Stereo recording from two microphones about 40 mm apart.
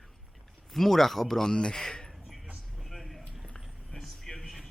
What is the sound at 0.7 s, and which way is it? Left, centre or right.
Speech, centre.